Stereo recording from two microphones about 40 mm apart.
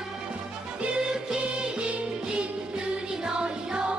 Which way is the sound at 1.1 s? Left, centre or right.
Centre.